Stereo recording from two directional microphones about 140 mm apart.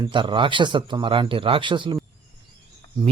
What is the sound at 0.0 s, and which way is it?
Speech, 35° right (ahead or behind).